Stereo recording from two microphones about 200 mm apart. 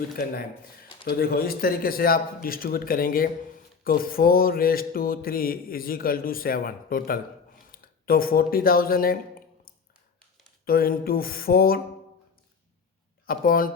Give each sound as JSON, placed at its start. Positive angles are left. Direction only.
{"t": 1.0, "sound": "mantra", "side_deg": 50}
{"t": 7.7, "sound": "speech", "side_deg": 45}
{"t": 10.7, "sound": "mantra", "side_deg": 50}
{"t": 13.2, "sound": "mantra", "side_deg": 45}